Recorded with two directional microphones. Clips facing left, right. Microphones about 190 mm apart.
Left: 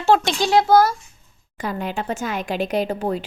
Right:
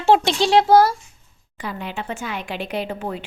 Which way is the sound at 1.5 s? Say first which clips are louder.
Left 4 dB; 45° left (ahead or behind).